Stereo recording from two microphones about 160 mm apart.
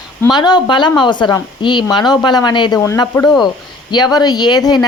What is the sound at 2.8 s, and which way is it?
Speech, 15° left (ahead or behind).